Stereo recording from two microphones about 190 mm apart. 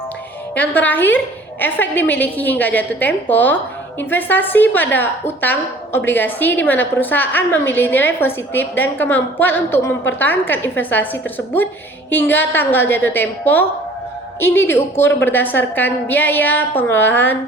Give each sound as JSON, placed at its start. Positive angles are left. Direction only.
{"t": 0.5, "sound": "a woman's voice", "side_deg": 10}